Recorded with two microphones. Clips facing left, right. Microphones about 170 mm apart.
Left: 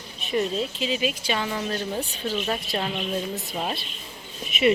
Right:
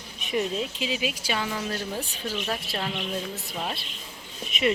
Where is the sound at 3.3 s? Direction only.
20° left (ahead or behind).